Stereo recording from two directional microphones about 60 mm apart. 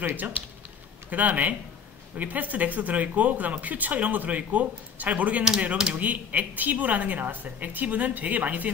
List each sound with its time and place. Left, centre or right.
0.1 s speech: right